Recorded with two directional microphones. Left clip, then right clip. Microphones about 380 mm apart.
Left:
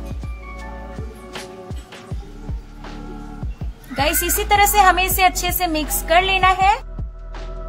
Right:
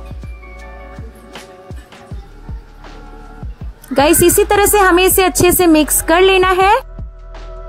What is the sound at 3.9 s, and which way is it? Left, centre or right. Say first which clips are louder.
A woman's voice: right 10 dB; right.